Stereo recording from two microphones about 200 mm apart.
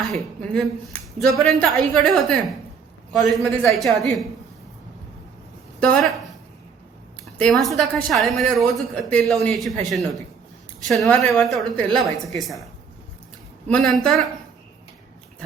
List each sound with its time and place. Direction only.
0.0 s a woman's voice: centre (ahead or behind)
5.8 s a woman's voice: centre (ahead or behind)
7.3 s a woman's voice: centre (ahead or behind)
13.7 s a woman's voice: 5° left (ahead or behind)